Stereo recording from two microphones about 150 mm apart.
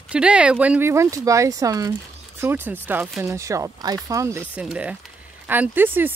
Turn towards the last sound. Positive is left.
turn(degrees=-15)  # may be behind; listen again after turning